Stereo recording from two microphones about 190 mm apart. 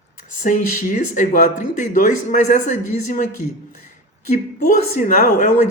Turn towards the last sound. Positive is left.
turn(degrees=40)  # may be behind; listen again after turning